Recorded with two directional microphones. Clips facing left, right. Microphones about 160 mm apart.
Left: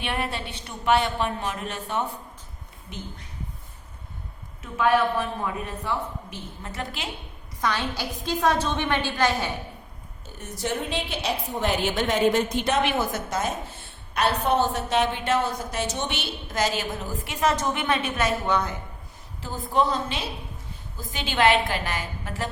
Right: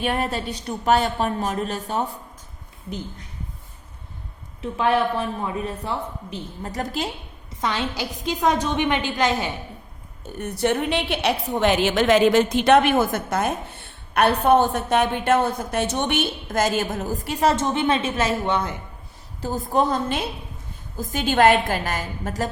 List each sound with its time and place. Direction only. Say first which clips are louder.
0.0 s a woman's voice: right 5 dB; 40° right (ahead or behind)
4.6 s a woman's voice: right 1 dB; 30° right (ahead or behind)
7.6 s a woman's voice: right 2 dB; 20° right (ahead or behind)
10.3 s a woman's voice: right 7 dB; 65° right (ahead or behind); by 12.8 s 80° right
12.8 s a woman's voice: right 5 dB; 50° right (ahead or behind); by 18.7 s 25° right (ahead or behind)
19.4 s a woman's voice: right 3 dB; 45° right (ahead or behind)